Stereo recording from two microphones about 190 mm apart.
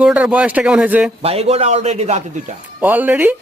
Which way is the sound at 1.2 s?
30° right (ahead or behind).